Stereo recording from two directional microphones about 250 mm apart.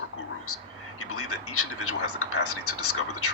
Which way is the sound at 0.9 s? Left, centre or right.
Left.